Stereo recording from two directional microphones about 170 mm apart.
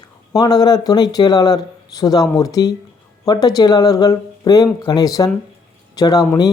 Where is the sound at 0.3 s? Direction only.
20° left (ahead or behind).